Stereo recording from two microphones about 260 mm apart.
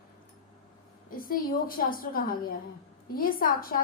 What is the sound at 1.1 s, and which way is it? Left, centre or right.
A woman's voice, left.